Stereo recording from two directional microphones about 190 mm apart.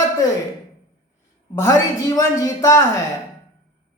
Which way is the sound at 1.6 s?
15° left (ahead or behind).